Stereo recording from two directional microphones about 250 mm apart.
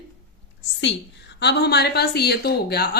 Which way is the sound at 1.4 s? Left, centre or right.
Left.